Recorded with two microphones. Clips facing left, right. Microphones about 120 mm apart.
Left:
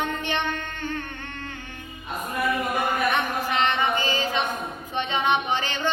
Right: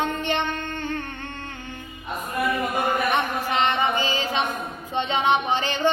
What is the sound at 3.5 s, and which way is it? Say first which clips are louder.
Music: right 2 dB; 25° right (ahead or behind).